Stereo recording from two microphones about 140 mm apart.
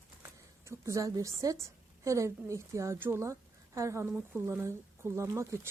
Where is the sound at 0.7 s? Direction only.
20° right (ahead or behind).